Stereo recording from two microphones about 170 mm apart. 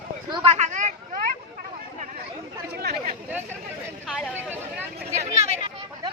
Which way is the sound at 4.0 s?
Centre (ahead or behind).